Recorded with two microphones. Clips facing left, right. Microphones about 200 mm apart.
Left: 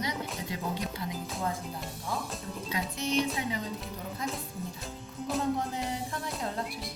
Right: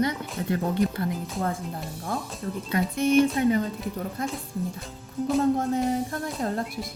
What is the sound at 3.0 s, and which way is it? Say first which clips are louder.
Speech: right 10 dB; 55° right (ahead or behind).